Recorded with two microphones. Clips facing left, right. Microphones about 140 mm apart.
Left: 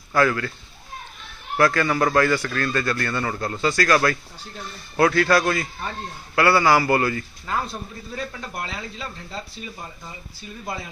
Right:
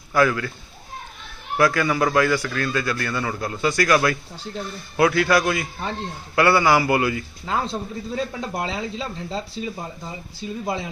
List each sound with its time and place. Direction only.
0.1 s a man's voice: 10° right (ahead or behind)
1.5 s a man's voice: 10° right (ahead or behind)